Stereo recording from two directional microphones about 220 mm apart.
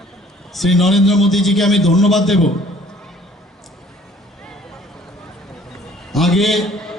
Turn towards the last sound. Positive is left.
turn(degrees=0)  # may be behind; listen again after turning